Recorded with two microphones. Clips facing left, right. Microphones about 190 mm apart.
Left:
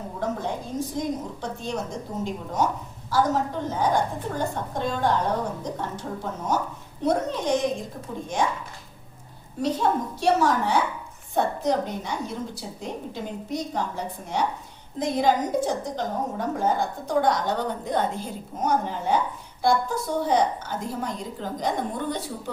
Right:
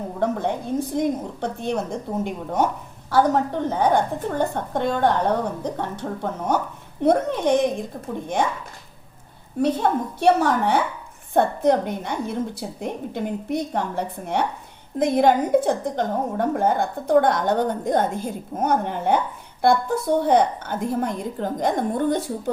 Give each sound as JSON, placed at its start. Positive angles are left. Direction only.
{"t": 0.2, "sound": "a sound", "side_deg": -60}
{"t": 0.9, "sound": "a woman's voice", "side_deg": -60}
{"t": 9.8, "sound": "a woman's voice", "side_deg": -60}